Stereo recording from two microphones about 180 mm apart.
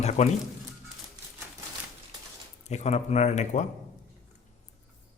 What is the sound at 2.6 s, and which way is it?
Speech, 40° left (ahead or behind).